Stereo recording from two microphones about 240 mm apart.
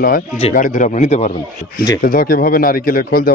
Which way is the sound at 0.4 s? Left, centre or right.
Left.